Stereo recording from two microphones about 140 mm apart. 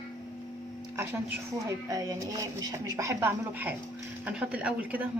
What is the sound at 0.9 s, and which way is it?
A woman's voice, 15° right (ahead or behind).